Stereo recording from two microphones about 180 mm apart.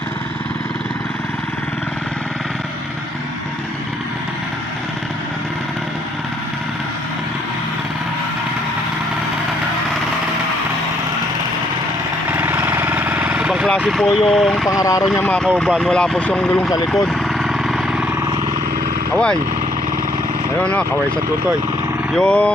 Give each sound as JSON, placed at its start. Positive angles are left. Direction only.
{"t": 12.3, "sound": "engine", "side_deg": -10}
{"t": 13.8, "sound": "speech", "side_deg": 0}
{"t": 14.7, "sound": "speech", "side_deg": 20}
{"t": 15.2, "sound": "speech", "side_deg": 10}
{"t": 17.1, "sound": "vehicle", "side_deg": 0}
{"t": 19.1, "sound": "speech", "side_deg": 5}
{"t": 22.1, "sound": "speech", "side_deg": 5}